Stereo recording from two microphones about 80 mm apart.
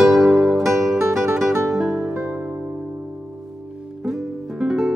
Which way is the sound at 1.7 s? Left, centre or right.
Centre.